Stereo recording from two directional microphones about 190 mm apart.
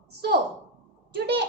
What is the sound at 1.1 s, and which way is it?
Speech, 60° right (ahead or behind).